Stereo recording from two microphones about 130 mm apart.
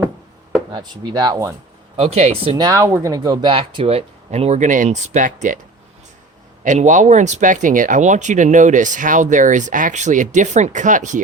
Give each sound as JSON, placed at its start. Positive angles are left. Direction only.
{"t": 0.7, "sound": "speech", "side_deg": -30}
{"t": 2.0, "sound": "speech", "side_deg": -55}
{"t": 2.6, "sound": "speech", "side_deg": -25}
{"t": 6.7, "sound": "speech", "side_deg": -70}